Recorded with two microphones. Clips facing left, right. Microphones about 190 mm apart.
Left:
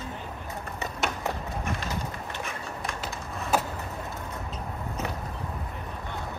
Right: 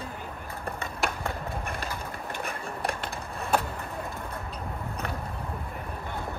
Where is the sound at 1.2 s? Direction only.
55° right (ahead or behind).